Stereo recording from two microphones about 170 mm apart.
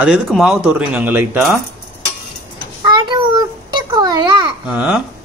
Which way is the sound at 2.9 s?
30° right (ahead or behind).